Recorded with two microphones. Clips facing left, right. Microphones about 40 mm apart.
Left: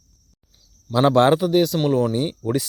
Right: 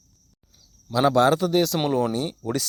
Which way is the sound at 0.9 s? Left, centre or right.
Left.